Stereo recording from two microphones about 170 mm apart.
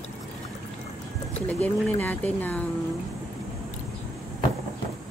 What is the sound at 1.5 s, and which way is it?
Speech, 10° left (ahead or behind).